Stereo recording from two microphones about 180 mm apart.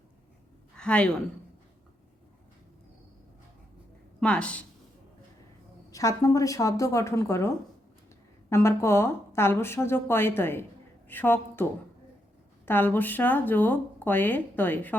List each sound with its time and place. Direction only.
0.8 s a woman's voice: 5° left (ahead or behind)
4.2 s speech: 5° left (ahead or behind)
5.9 s speech: 20° left (ahead or behind)